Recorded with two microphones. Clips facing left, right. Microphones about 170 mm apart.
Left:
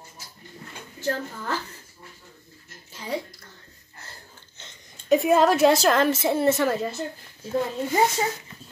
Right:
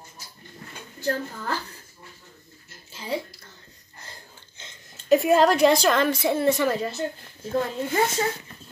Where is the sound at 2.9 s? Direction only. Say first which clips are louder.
Right 1 dB; 25° right (ahead or behind).